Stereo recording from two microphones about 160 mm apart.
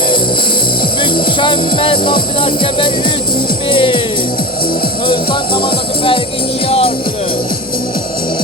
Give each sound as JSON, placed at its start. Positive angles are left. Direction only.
{"t": 1.1, "sound": "speech", "side_deg": 30}
{"t": 6.7, "sound": "speech", "side_deg": 35}